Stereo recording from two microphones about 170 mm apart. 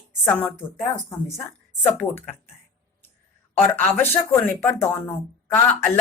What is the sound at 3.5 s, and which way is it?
Speech, 10° left (ahead or behind).